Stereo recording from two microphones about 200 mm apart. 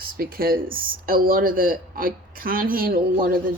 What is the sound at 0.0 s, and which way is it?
Speech, 50° right (ahead or behind).